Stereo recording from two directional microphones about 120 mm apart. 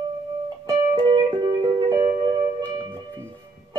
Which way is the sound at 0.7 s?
35° right (ahead or behind).